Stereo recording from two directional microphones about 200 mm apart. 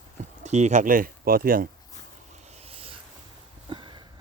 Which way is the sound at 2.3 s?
35° right (ahead or behind).